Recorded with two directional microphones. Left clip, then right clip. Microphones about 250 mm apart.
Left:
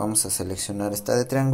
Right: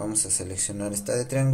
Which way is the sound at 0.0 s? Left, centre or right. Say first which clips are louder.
Left 3 dB; centre.